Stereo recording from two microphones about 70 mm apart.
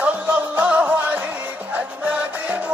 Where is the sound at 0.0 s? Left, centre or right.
Right.